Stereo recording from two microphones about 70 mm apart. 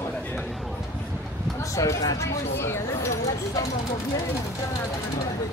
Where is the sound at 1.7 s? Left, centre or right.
Left.